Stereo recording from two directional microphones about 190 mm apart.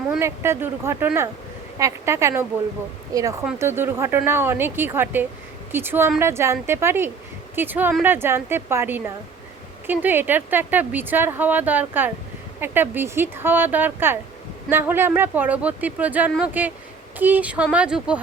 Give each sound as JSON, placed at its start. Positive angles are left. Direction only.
{"t": 0.2, "sound": "speech", "side_deg": -15}